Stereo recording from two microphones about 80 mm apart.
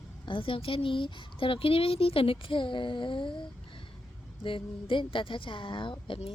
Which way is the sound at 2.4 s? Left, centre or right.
Left.